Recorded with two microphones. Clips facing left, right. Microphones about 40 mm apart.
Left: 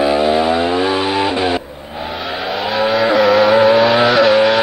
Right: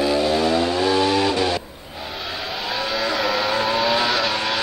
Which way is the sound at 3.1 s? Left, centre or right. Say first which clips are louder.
Left 12 dB; centre.